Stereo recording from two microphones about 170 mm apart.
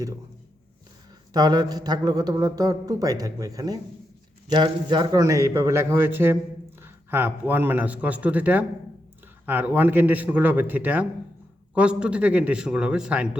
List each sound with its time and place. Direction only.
1.3 s a man's voice: 25° right (ahead or behind); by 13.2 s 5° right (ahead or behind)